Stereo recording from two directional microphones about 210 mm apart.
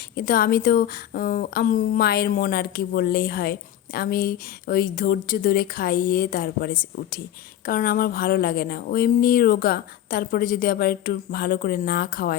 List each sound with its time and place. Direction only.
0.2 s a woman's voice: 45° left (ahead or behind)